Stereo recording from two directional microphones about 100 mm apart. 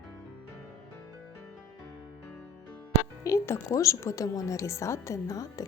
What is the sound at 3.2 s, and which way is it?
A woman's voice, 30° left (ahead or behind).